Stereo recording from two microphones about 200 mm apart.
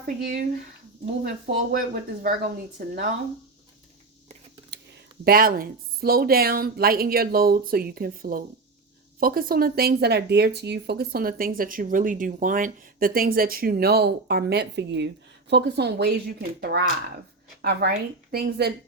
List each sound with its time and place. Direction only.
0.0 s speech: 50° right (ahead or behind)
1.7 s speech: 45° right (ahead or behind)
5.2 s speech: 50° right (ahead or behind)